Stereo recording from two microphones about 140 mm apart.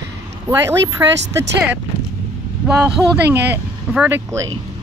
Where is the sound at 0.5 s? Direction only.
20° right (ahead or behind).